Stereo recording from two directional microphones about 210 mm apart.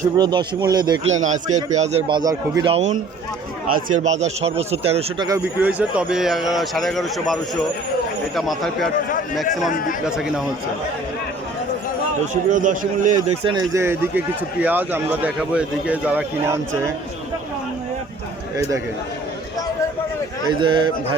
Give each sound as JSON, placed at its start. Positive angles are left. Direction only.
{"t": 0.2, "sound": "speech", "side_deg": -20}
{"t": 1.2, "sound": "a man's voice", "side_deg": -35}
{"t": 5.3, "sound": "a man's voice", "side_deg": -10}
{"t": 9.5, "sound": "speech", "side_deg": 40}
{"t": 10.1, "sound": "a man's voice", "side_deg": -5}
{"t": 12.3, "sound": "a man's voice", "side_deg": -35}
{"t": 20.5, "sound": "speech", "side_deg": -20}